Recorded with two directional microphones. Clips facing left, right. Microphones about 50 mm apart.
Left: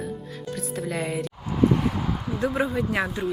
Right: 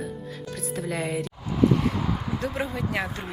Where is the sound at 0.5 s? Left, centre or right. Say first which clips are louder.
Left 1 dB; centre.